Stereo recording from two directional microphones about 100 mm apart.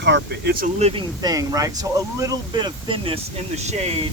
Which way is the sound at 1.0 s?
40° right (ahead or behind).